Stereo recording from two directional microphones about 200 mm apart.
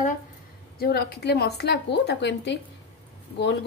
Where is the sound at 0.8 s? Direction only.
50° left (ahead or behind).